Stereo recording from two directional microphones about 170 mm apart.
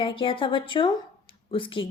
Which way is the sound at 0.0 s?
30° left (ahead or behind).